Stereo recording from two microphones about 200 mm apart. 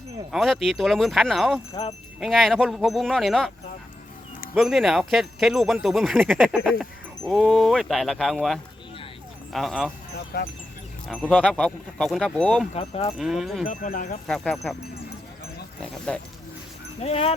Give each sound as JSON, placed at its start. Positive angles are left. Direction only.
{"t": 0.3, "sound": "speech", "side_deg": 0}
{"t": 4.5, "sound": "speech", "side_deg": 0}
{"t": 10.3, "sound": "speech", "side_deg": 50}
{"t": 11.1, "sound": "speech", "side_deg": 5}
{"t": 12.7, "sound": "speech", "side_deg": 30}
{"t": 13.1, "sound": "speech", "side_deg": 0}
{"t": 13.7, "sound": "speech", "side_deg": 40}
{"t": 14.3, "sound": "speech", "side_deg": 0}
{"t": 15.8, "sound": "speech", "side_deg": 5}
{"t": 17.0, "sound": "speech", "side_deg": 30}